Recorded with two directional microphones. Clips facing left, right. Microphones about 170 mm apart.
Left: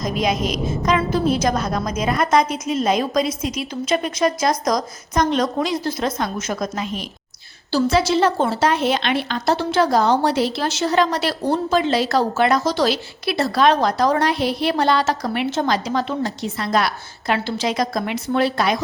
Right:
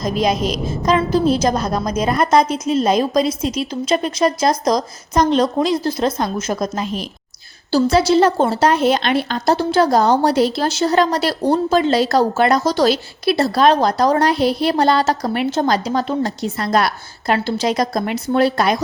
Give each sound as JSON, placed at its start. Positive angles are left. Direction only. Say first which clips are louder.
{"t": 0.2, "sound": "a woman's voice", "louder": "right 3 dB", "side_deg": -35}